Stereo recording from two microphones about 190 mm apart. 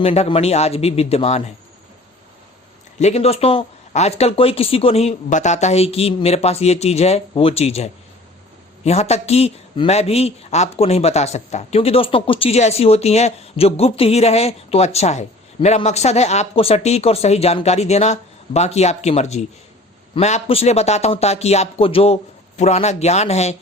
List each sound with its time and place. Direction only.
0.0 s a man's voice: 30° left (ahead or behind)
3.0 s a man's voice: 35° left (ahead or behind)